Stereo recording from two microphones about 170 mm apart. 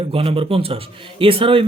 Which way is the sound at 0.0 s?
35° right (ahead or behind).